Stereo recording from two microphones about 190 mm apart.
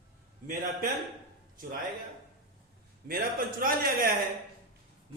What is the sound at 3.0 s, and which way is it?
A man's voice, 50° right (ahead or behind).